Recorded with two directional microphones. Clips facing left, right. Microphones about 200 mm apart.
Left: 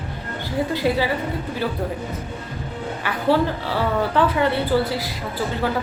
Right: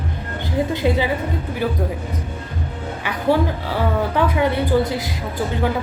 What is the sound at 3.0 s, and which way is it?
A woman's voice, 15° right (ahead or behind).